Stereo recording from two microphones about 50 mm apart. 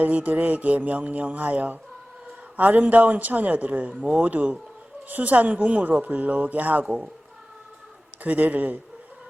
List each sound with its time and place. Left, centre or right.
0.0 s a man's voice: right
8.2 s a man's voice: right